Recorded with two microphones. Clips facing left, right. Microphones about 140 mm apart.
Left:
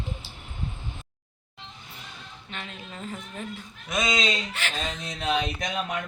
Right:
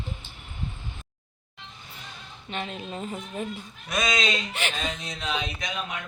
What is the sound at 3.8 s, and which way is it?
Speech, 20° left (ahead or behind).